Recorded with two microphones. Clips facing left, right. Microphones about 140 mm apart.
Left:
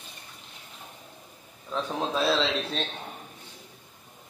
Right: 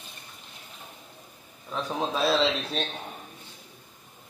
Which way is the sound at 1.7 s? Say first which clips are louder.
Even; 5° right (ahead or behind).